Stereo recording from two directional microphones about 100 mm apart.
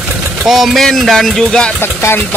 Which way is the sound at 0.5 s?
Centre (ahead or behind).